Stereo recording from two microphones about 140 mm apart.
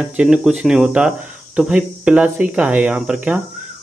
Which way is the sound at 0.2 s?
5° right (ahead or behind).